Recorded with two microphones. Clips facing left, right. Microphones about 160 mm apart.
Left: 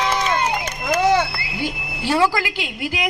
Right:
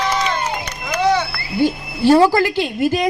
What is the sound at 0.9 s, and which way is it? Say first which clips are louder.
Vehicle: even; 45° left (ahead or behind).